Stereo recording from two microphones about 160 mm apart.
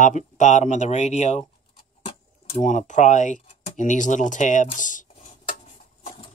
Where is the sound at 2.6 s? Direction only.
50° left (ahead or behind).